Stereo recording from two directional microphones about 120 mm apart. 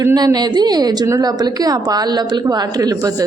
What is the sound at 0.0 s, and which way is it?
A woman's voice, 30° right (ahead or behind).